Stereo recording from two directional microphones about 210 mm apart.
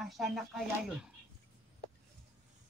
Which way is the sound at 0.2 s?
Centre (ahead or behind).